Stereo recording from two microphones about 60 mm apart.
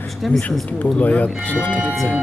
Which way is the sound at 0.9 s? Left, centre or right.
Left.